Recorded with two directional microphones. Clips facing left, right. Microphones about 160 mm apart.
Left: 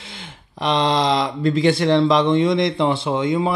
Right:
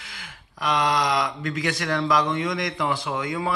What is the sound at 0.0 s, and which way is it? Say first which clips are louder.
Speech: left 5 dB; 25° left (ahead or behind).